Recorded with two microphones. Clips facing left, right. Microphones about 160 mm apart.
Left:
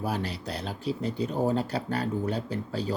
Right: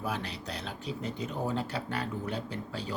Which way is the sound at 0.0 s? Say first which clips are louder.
Left 4 dB; 35° left (ahead or behind).